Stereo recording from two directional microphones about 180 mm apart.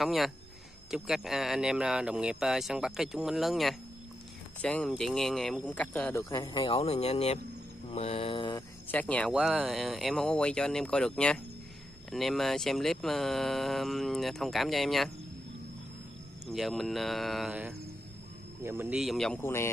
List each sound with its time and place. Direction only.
0.0 s speech: centre (ahead or behind)
6.3 s speech: 30° left (ahead or behind)
7.9 s mantra: 35° left (ahead or behind)
8.9 s speech: 10° left (ahead or behind)
9.3 s speech: centre (ahead or behind)
16.4 s speech: centre (ahead or behind)